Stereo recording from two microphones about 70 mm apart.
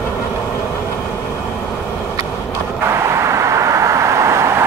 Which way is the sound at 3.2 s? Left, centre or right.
Right.